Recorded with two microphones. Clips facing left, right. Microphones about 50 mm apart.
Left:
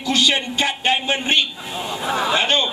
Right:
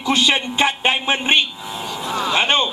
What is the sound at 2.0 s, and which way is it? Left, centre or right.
Speech, centre.